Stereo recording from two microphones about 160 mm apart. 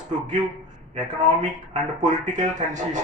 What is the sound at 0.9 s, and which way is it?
Speech, 50° right (ahead or behind).